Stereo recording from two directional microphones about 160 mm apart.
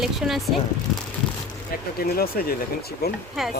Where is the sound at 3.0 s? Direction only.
85° left.